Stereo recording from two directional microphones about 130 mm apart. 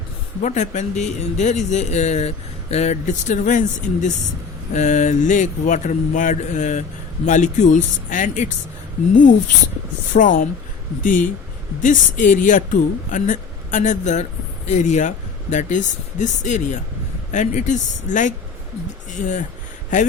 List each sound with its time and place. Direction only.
0.4 s speech: 65° left (ahead or behind)
10.1 s speech: 90° left; by 19.5 s 70° left (ahead or behind)